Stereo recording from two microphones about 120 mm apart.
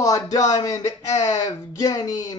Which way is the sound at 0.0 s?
30° left (ahead or behind).